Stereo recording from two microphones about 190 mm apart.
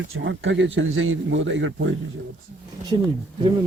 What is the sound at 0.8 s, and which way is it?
A man's voice, 90° right.